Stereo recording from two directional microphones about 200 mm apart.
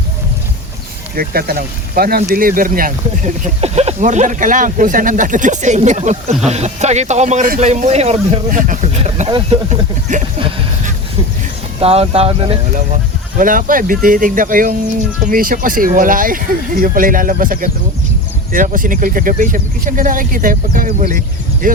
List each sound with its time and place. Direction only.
1.1 s speech: 50° right (ahead or behind)
11.8 s speech: 30° right (ahead or behind)
13.4 s speech: 45° right (ahead or behind)